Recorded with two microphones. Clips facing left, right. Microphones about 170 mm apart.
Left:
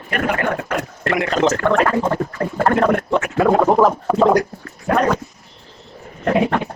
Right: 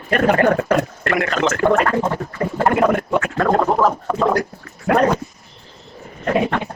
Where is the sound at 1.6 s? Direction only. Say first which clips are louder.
Even; 5° right (ahead or behind).